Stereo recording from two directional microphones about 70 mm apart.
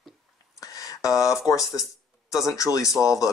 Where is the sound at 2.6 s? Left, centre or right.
Left.